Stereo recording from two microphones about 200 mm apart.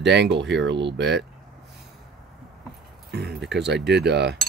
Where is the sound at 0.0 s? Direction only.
60° right (ahead or behind).